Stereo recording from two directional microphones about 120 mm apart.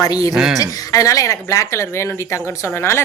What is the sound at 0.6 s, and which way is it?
Speech, 30° left (ahead or behind).